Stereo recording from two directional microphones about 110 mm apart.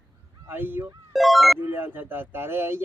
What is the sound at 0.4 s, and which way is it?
Speech, 20° right (ahead or behind).